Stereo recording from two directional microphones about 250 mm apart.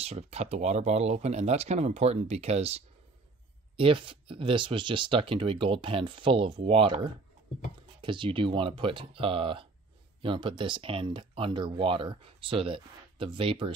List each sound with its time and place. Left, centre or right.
0.0 s speech: right